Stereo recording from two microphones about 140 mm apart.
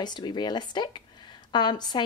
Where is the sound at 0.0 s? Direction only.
30° left (ahead or behind).